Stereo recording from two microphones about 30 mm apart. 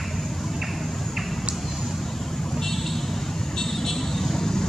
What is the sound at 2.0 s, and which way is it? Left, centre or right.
Vehicle, centre.